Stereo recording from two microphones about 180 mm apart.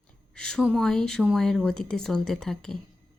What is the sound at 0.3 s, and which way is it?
A woman's voice, 5° left (ahead or behind).